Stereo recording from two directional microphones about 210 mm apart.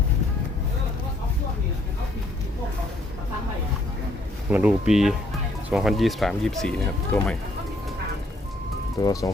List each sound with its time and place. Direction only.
4.4 s speech: 5° right (ahead or behind); by 7.3 s 10° left (ahead or behind)
9.0 s speech: 20° left (ahead or behind)